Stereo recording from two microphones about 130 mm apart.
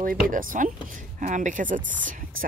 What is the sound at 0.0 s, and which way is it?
Speech, 90° right.